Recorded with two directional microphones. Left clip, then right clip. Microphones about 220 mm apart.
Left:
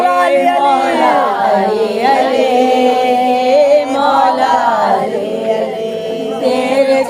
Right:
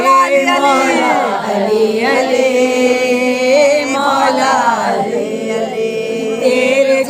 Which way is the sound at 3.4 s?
50° right (ahead or behind).